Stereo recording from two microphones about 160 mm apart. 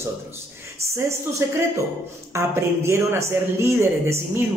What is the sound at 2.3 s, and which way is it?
A man's voice, 15° right (ahead or behind).